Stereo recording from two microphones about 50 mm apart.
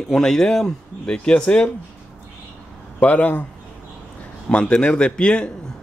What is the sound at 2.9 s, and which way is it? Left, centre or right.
Speech, left.